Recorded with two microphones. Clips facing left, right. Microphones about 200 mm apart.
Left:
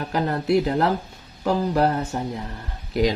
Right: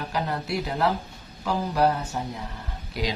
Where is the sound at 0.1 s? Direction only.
50° left (ahead or behind).